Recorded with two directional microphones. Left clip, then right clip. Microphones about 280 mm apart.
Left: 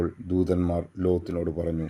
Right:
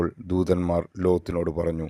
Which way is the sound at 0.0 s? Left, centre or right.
Right.